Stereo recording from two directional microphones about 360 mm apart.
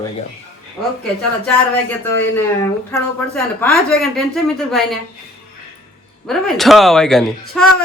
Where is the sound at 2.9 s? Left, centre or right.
Centre.